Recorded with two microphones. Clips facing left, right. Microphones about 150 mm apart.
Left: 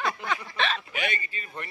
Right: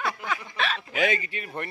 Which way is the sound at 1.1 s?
80° right.